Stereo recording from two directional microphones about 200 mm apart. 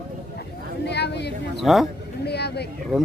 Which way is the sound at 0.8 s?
60° left (ahead or behind).